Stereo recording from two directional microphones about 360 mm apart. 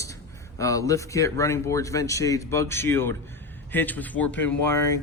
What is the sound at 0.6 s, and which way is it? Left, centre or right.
Speech, centre.